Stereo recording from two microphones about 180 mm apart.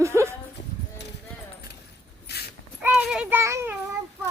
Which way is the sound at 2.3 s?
65° left (ahead or behind).